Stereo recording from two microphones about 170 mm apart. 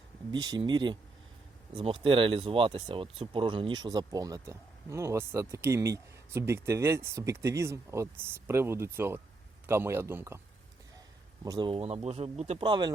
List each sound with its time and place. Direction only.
0.3 s speech: 25° right (ahead or behind)
11.4 s speech: 20° right (ahead or behind)
11.7 s speech: 40° right (ahead or behind)